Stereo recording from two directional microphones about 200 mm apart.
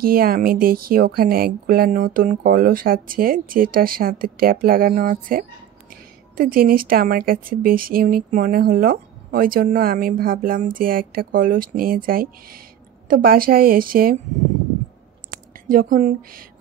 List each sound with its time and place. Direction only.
0.0 s speech: 45° right (ahead or behind)
15.3 s speech: 45° right (ahead or behind)